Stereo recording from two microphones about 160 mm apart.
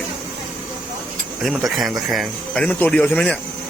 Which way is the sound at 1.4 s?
Centre (ahead or behind).